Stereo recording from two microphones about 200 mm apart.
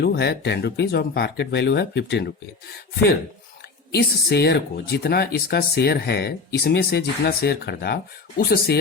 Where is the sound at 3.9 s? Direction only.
55° left (ahead or behind).